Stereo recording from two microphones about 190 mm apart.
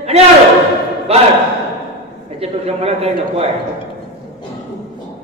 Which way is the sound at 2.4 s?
30° right (ahead or behind).